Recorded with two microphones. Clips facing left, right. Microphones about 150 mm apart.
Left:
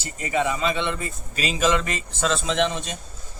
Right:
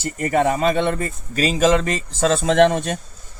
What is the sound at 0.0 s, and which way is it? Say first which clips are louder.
Speech: right 6 dB; 55° right (ahead or behind).